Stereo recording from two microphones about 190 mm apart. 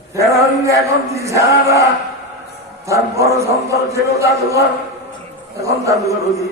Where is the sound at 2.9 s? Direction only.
15° right (ahead or behind).